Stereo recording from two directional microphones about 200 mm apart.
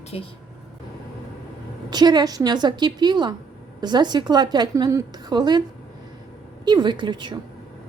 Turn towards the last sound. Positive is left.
turn(degrees=-20)  # may be behind; listen again after turning